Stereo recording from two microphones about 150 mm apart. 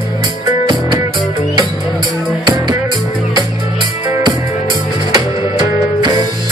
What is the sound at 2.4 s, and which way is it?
Music, 30° right (ahead or behind).